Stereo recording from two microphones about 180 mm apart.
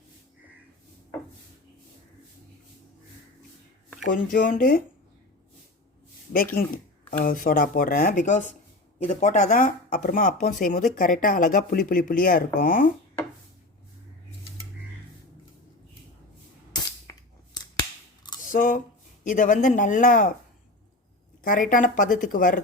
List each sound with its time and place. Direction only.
4.1 s speech: 50° left (ahead or behind)
6.3 s speech: 55° left (ahead or behind)
18.3 s a sound: 45° left (ahead or behind)
19.2 s speech: 45° left (ahead or behind)
21.4 s speech: 45° left (ahead or behind)